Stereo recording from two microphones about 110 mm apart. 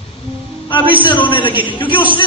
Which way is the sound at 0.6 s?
50° left (ahead or behind).